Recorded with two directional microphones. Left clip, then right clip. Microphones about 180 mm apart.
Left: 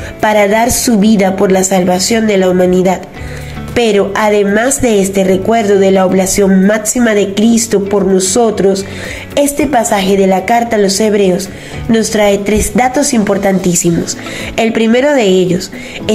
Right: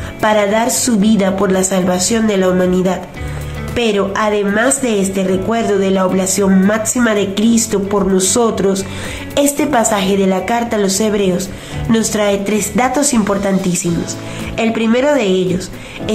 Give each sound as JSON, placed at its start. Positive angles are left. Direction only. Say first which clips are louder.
{"t": 0.2, "sound": "a woman's voice", "louder": "left 4 dB", "side_deg": 15}